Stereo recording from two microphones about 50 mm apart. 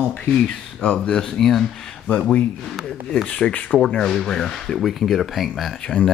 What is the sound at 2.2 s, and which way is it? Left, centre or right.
Speech, left.